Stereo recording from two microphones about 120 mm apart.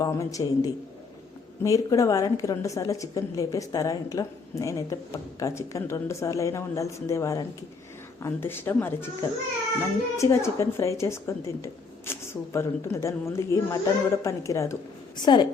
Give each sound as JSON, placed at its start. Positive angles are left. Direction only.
{"t": 0.0, "sound": "a woman's voice", "side_deg": 30}